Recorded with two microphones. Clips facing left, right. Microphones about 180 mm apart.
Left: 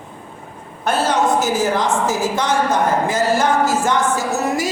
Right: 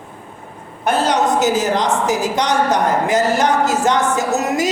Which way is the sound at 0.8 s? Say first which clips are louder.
Right 1 dB; 15° right (ahead or behind).